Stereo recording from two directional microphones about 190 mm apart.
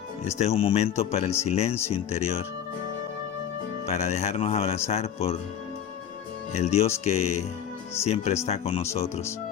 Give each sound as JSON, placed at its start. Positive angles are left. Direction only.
{"t": 0.3, "sound": "speech", "side_deg": 35}
{"t": 3.8, "sound": "speech", "side_deg": 35}
{"t": 6.5, "sound": "speech", "side_deg": 35}